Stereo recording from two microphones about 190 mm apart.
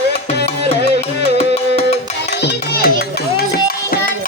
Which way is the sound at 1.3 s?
30° left (ahead or behind).